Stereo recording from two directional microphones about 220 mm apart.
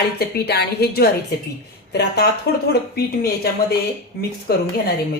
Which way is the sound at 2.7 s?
45° left (ahead or behind).